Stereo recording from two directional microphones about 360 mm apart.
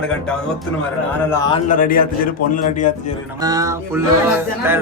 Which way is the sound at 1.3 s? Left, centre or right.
Centre.